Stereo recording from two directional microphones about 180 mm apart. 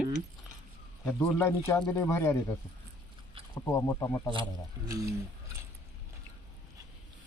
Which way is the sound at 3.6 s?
15° left (ahead or behind).